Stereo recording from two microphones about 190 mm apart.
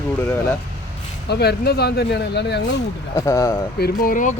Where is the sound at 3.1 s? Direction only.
15° left (ahead or behind).